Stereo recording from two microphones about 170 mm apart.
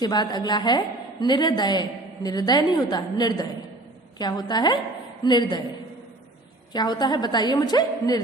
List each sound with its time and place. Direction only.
0.0 s a woman's voice: 25° left (ahead or behind)
6.7 s a woman's voice: 25° left (ahead or behind)